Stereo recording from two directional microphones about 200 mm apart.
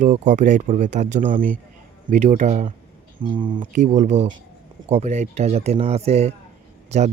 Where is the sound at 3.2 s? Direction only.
25° right (ahead or behind).